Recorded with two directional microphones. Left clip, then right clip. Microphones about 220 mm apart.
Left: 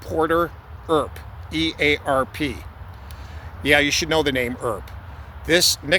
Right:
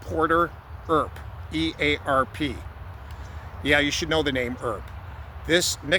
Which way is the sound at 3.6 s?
25° left (ahead or behind).